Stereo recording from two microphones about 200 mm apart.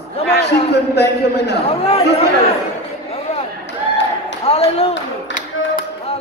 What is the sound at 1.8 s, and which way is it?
Speech, 30° left (ahead or behind).